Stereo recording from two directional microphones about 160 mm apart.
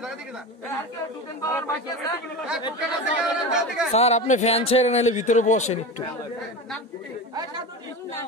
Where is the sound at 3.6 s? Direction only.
Centre (ahead or behind).